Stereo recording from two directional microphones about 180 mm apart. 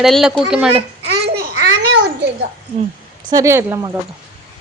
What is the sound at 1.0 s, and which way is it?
Babbling, 65° right (ahead or behind).